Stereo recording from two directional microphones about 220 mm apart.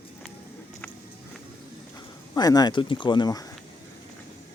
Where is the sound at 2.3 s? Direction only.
15° left (ahead or behind).